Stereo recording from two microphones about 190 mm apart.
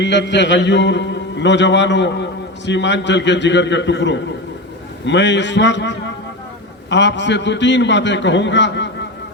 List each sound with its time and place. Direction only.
0.0 s a man's voice: 70° left (ahead or behind)